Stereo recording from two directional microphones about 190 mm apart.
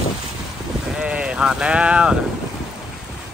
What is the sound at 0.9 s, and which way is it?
Speech, 5° right (ahead or behind).